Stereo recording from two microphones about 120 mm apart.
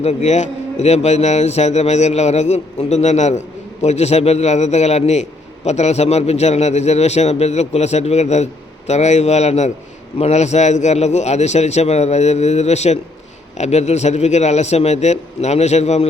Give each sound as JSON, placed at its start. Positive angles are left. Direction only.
{"t": 0.0, "sound": "a man's voice", "side_deg": 65}